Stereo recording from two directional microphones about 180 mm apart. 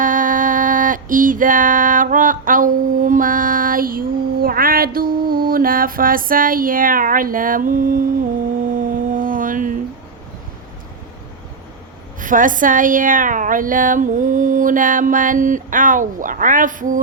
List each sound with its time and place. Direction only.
0.0 s female singing: 45° right (ahead or behind)
8.8 s music: 50° right (ahead or behind)
12.2 s a woman's voice: 45° right (ahead or behind)